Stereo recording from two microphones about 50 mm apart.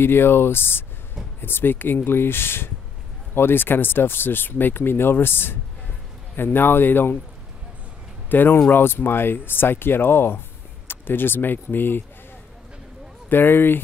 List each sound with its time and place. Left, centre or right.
0.0 s speech: left
8.3 s speech: left
13.3 s speech: left